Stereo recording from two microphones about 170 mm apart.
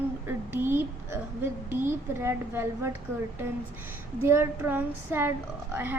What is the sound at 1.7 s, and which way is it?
A woman's voice, 15° right (ahead or behind).